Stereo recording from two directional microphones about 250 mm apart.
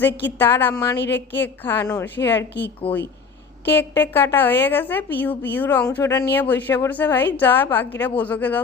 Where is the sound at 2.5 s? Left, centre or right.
Left.